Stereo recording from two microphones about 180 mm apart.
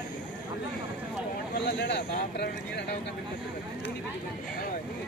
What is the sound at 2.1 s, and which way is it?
Speech, 60° left (ahead or behind).